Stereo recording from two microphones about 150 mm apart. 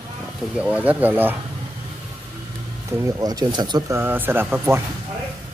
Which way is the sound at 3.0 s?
25° right (ahead or behind).